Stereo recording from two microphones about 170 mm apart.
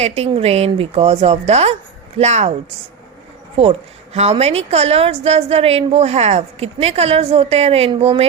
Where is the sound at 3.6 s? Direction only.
35° right (ahead or behind).